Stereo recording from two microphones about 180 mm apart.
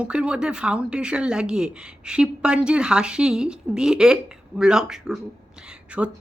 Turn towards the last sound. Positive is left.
turn(degrees=-5)  # may be behind; listen again after turning